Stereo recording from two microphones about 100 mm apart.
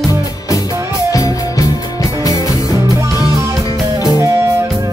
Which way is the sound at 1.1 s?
35° left (ahead or behind).